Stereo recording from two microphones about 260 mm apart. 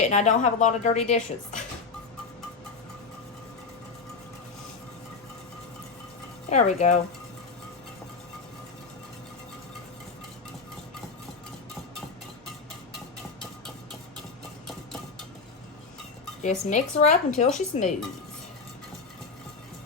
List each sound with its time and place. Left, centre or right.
0.0 s speech: left
6.5 s speech: left
16.4 s speech: left